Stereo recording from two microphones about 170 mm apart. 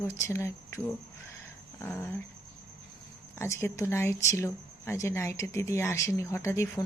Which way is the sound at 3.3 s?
15° left (ahead or behind).